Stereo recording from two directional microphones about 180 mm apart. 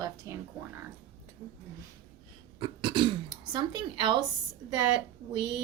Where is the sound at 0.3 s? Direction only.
15° right (ahead or behind).